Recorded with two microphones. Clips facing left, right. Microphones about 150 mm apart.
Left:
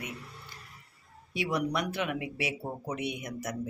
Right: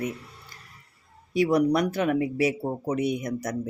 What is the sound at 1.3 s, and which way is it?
Speech, 40° right (ahead or behind).